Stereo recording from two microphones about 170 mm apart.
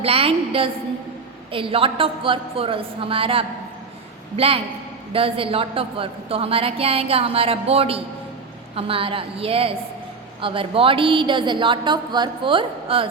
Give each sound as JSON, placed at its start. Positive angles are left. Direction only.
{"t": 0.0, "sound": "a woman's voice", "side_deg": -35}